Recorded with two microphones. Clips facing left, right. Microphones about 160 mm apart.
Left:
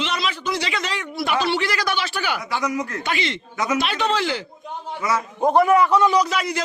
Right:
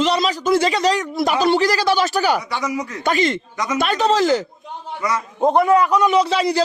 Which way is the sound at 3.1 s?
45° right (ahead or behind).